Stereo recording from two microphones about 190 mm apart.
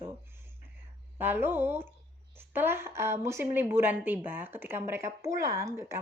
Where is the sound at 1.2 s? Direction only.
10° right (ahead or behind).